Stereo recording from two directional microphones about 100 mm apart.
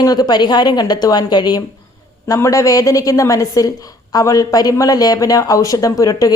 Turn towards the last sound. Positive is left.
turn(degrees=35)  # may be behind; listen again after turning